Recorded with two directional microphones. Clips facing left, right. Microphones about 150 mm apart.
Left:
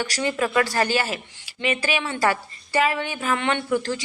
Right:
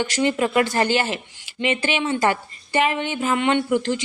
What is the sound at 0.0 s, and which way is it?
A woman's voice, 20° right (ahead or behind).